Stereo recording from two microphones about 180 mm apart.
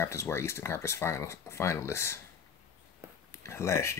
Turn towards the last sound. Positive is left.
turn(degrees=15)  # may be behind; listen again after turning